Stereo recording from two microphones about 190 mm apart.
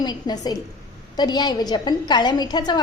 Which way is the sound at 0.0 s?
20° left (ahead or behind).